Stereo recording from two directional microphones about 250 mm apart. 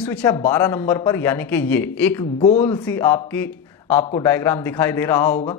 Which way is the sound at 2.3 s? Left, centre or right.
Left.